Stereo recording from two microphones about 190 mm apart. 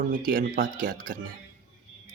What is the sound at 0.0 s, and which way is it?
Speech, 45° right (ahead or behind).